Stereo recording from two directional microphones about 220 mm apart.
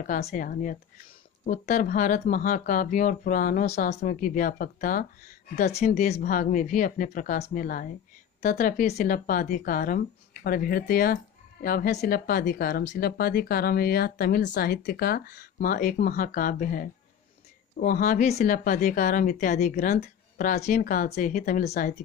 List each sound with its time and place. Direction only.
0.0 s speech: 40° left (ahead or behind)